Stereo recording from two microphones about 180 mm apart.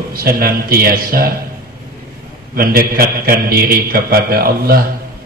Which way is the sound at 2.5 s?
55° right (ahead or behind).